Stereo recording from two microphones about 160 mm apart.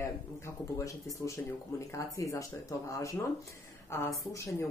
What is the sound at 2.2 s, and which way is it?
Speech, 20° left (ahead or behind).